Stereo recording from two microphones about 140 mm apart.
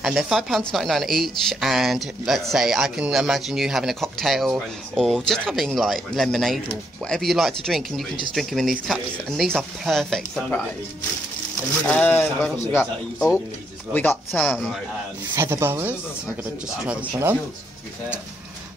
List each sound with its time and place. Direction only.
0.0 s speech: 5° right (ahead or behind)
11.8 s speech: 10° left (ahead or behind)
13.9 s speech: 10° left (ahead or behind)
14.5 s speech: centre (ahead or behind)
15.3 s speech: 20° right (ahead or behind)